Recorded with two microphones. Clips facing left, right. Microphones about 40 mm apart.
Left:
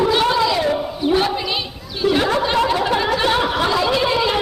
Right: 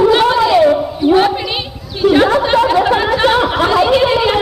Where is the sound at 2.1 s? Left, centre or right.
Right.